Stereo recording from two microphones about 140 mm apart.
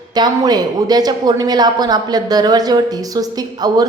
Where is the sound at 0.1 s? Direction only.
30° right (ahead or behind).